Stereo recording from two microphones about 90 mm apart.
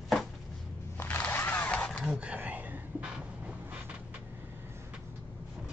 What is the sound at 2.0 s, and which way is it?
Whispering, 15° right (ahead or behind).